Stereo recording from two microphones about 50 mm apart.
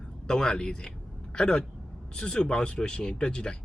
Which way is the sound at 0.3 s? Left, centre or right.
Centre.